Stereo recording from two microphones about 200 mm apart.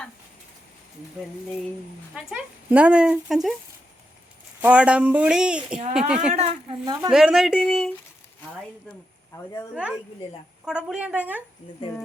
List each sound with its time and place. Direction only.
2.1 s speech: 5° right (ahead or behind)
4.6 s speech: 5° right (ahead or behind)
6.3 s speech: 30° right (ahead or behind)
7.1 s speech: centre (ahead or behind)
10.7 s a woman's voice: 5° right (ahead or behind)